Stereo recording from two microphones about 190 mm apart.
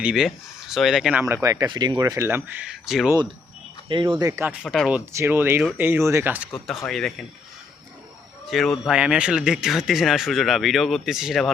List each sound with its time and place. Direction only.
0.0 s speech: 5° right (ahead or behind)
1.2 s speech: 15° right (ahead or behind)
3.8 s speech: 25° right (ahead or behind)
4.6 s speech: centre (ahead or behind)
6.5 s speech: centre (ahead or behind)
8.4 s speech: centre (ahead or behind)